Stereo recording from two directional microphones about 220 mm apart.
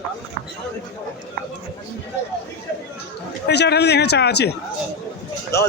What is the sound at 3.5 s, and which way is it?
Speech, 50° left (ahead or behind).